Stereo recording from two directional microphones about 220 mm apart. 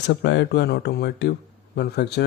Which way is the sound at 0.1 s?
55° left (ahead or behind).